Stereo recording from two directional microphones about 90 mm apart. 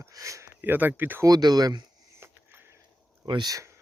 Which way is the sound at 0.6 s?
20° right (ahead or behind).